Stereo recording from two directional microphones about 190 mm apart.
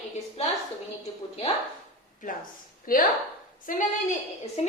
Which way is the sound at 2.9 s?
50° left (ahead or behind).